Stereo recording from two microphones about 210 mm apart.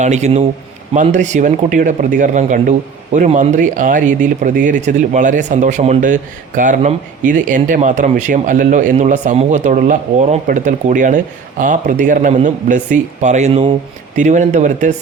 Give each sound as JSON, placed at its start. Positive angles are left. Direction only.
{"t": 0.0, "sound": "speech", "side_deg": -35}